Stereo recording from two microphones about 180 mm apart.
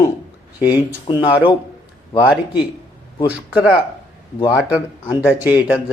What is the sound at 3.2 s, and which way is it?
Speech, 5° right (ahead or behind).